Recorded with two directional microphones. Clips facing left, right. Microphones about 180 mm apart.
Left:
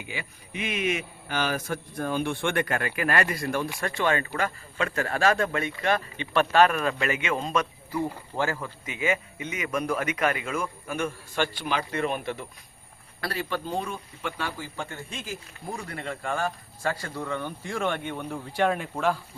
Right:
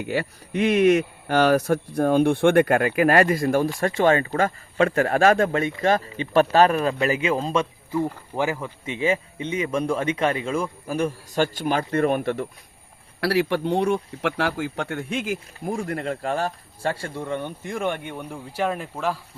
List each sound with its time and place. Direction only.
0.0 s a man's voice: 60° right (ahead or behind); by 8.7 s 15° right (ahead or behind)
8.8 s speech: 30° right (ahead or behind); by 12.5 s 55° right (ahead or behind)
13.2 s a man's voice: 70° right (ahead or behind)
15.3 s speech: 50° right (ahead or behind); by 19.1 s centre (ahead or behind)